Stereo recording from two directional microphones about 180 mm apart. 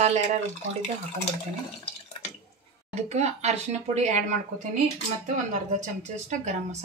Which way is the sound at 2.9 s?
40° right (ahead or behind).